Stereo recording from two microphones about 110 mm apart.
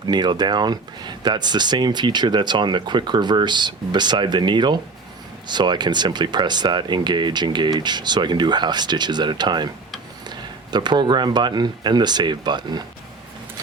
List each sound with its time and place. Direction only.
0.1 s speech: 40° right (ahead or behind)